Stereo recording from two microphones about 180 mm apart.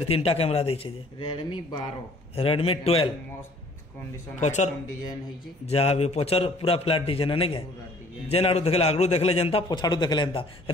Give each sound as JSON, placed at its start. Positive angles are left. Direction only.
{"t": 0.1, "sound": "a man's voice", "side_deg": 35}
{"t": 4.4, "sound": "a man's voice", "side_deg": 40}
{"t": 5.7, "sound": "a man's voice", "side_deg": 35}